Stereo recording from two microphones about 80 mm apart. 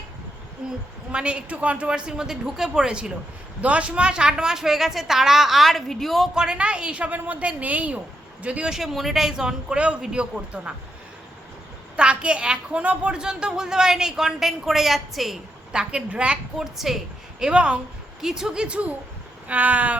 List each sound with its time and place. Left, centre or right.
0.6 s a woman's voice: centre
6.3 s a woman's voice: centre
8.7 s a woman's voice: centre
11.9 s a woman's voice: centre
19.5 s cat: centre